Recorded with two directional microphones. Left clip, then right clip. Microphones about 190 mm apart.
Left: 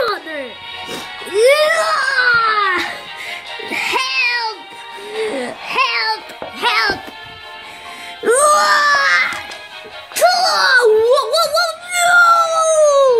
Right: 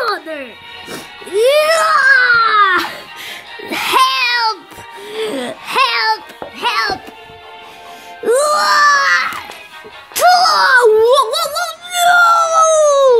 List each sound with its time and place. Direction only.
0.8 s music: 15° right (ahead or behind)
1.7 s baby cry: 30° right (ahead or behind)
2.6 s music: 35° right (ahead or behind)
5.1 s a sound: 35° right (ahead or behind)
6.6 s music: centre (ahead or behind)
8.2 s wail: centre (ahead or behind)
10.1 s a sound: 15° right (ahead or behind)